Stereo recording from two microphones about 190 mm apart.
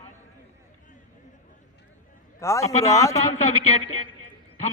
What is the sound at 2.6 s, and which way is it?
Speech, 35° left (ahead or behind).